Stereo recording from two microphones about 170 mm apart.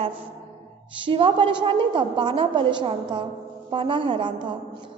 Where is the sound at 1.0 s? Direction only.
30° right (ahead or behind).